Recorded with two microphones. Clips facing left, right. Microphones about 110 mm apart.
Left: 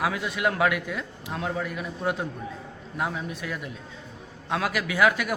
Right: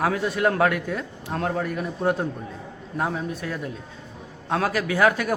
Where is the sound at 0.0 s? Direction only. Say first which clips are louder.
Right 4 dB; 40° right (ahead or behind).